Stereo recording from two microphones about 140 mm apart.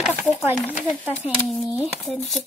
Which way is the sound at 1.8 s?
Centre (ahead or behind).